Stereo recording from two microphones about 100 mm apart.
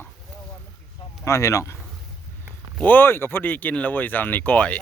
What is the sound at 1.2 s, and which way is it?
Speech, 30° left (ahead or behind).